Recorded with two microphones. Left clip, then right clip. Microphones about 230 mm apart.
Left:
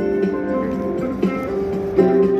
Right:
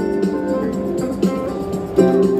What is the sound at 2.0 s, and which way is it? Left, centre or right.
Music, right.